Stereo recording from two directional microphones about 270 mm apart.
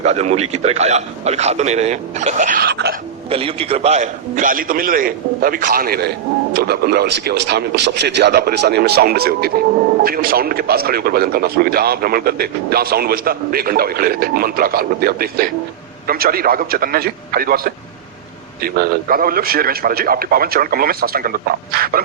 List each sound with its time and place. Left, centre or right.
0.0 s a man's voice: right
3.2 s speech: right